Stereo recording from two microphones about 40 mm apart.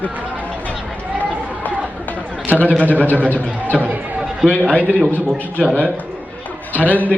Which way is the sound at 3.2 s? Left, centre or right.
Left.